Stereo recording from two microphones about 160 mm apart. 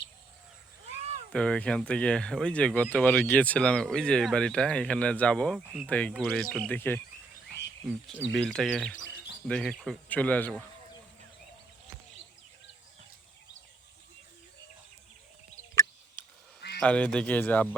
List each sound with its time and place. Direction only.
1.3 s speech: 5° left (ahead or behind)
6.7 s speech: 10° left (ahead or behind)
7.9 s speech: centre (ahead or behind)
15.7 s a sound: 15° left (ahead or behind)
16.6 s a sound: 90° left
16.8 s speech: 5° left (ahead or behind)